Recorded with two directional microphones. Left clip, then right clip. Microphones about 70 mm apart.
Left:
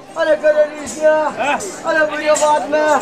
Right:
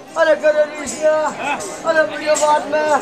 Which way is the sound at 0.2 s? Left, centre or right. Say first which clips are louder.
Right 1 dB; centre.